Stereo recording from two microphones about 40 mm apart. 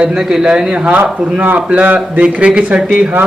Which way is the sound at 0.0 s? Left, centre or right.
Right.